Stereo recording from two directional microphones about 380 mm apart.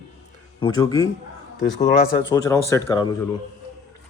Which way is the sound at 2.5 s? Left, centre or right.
Centre.